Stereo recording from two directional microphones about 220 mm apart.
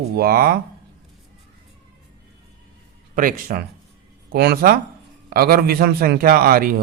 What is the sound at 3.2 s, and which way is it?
A man's voice, 40° right (ahead or behind).